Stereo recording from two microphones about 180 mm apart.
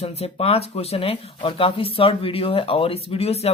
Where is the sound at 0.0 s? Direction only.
35° left (ahead or behind).